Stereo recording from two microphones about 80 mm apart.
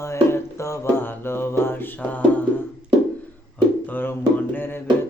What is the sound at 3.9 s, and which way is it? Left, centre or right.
Speech, left.